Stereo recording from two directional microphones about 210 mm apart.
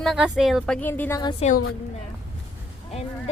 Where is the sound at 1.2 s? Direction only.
25° left (ahead or behind).